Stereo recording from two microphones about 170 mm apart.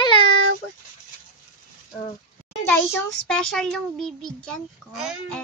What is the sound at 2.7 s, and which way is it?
A child's voice, 5° left (ahead or behind).